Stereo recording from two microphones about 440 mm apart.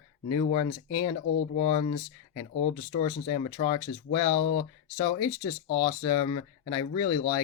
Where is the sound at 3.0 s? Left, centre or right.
Centre.